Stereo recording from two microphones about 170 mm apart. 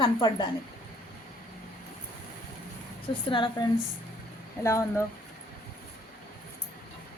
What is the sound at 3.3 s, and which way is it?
Speech, 30° left (ahead or behind).